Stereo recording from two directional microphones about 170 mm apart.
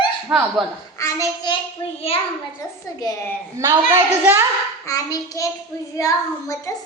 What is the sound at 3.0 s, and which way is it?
Speech, 20° left (ahead or behind).